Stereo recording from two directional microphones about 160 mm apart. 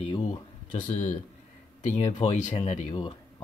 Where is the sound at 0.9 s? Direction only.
50° left (ahead or behind).